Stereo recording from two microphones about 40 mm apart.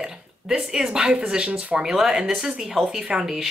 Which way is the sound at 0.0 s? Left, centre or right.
Centre.